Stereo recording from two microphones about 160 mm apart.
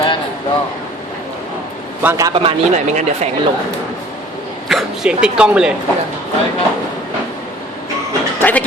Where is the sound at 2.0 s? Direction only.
20° right (ahead or behind).